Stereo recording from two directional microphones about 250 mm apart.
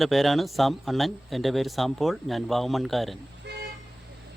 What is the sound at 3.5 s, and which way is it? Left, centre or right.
Vehicle, right.